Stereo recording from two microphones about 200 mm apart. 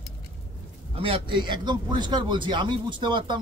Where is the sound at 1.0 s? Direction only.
25° right (ahead or behind).